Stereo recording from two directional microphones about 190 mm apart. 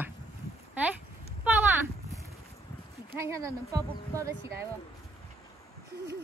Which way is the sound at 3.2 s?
15° right (ahead or behind).